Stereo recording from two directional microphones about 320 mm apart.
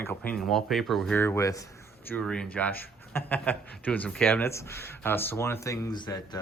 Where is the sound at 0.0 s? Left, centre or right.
Centre.